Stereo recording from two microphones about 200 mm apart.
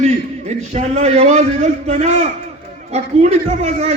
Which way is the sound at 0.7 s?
35° right (ahead or behind).